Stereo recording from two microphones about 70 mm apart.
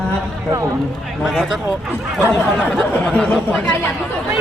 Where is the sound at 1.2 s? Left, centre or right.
Centre.